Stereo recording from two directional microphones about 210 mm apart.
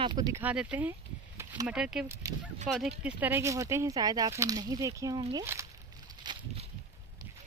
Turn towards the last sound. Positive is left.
turn(degrees=-15)  # may be behind; listen again after turning